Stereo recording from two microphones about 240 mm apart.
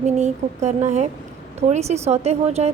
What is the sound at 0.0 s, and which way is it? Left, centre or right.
A woman's voice, right.